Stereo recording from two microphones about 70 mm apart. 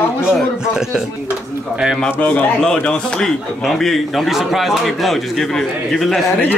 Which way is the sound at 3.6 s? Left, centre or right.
Centre.